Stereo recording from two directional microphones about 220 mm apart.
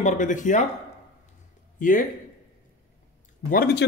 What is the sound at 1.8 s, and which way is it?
Speech, 35° left (ahead or behind).